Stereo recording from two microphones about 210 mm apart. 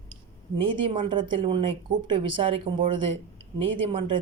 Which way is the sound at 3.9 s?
25° right (ahead or behind).